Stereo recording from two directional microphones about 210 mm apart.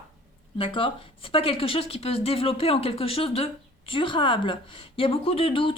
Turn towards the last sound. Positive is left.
turn(degrees=25)  # may be behind; listen again after turning